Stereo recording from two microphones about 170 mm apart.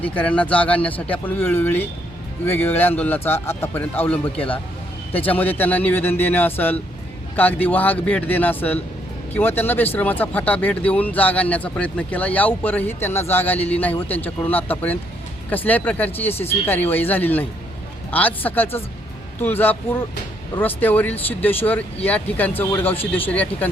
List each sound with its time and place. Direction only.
0.0 s speech: 10° left (ahead or behind)
4.4 s speech: 30° left (ahead or behind)
5.2 s speech: 10° left (ahead or behind)